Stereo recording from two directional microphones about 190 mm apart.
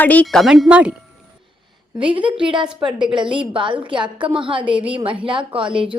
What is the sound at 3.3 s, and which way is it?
Speech, 25° right (ahead or behind).